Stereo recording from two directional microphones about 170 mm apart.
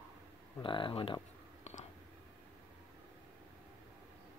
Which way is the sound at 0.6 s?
30° left (ahead or behind).